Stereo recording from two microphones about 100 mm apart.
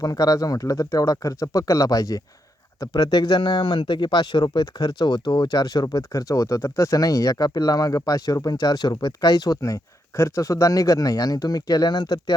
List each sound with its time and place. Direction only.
0.0 s speech: 40° left (ahead or behind)